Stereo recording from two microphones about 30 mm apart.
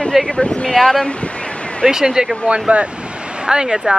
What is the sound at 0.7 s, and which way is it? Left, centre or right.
Speech, left.